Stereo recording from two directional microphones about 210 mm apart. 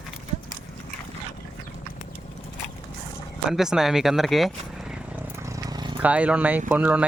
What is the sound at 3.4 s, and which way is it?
Speech, centre (ahead or behind).